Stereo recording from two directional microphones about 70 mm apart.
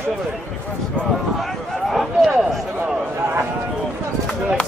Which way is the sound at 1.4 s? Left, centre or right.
Centre.